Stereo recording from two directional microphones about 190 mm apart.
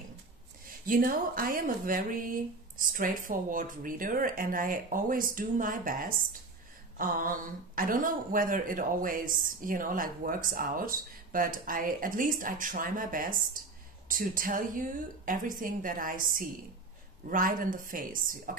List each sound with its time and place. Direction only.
0.7 s speech: 45° right (ahead or behind)